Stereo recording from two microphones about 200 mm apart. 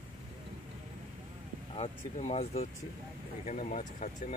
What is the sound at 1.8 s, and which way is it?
Speech, 35° left (ahead or behind).